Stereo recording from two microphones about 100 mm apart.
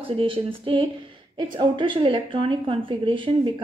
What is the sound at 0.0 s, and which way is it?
A woman's voice, 65° right (ahead or behind).